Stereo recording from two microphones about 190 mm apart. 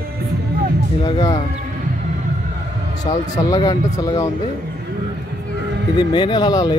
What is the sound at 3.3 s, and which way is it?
Speech, 20° left (ahead or behind).